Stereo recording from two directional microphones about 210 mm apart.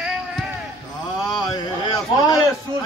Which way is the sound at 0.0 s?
Centre (ahead or behind).